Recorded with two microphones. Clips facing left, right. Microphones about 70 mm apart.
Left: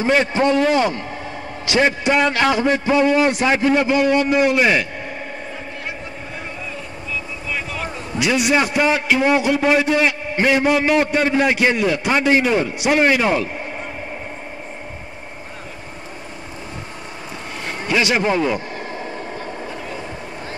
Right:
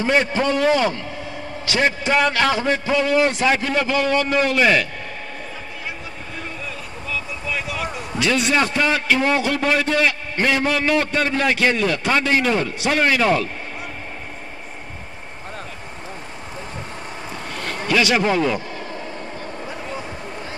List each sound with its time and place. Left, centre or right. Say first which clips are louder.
0.0 s a man's voice: left 2 dB; left
1.7 s a man's voice: left 3 dB; centre
7.5 s a sound: even; centre
8.2 s a man's voice: left 2 dB; centre
17.3 s a sound: even; centre
18.7 s vehicle: left 2 dB; left